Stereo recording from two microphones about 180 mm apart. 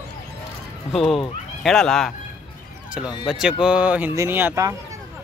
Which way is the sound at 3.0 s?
25° left (ahead or behind).